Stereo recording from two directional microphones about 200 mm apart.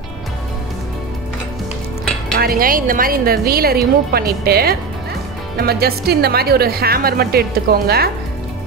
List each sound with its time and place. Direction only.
2.3 s a woman's voice: 45° right (ahead or behind)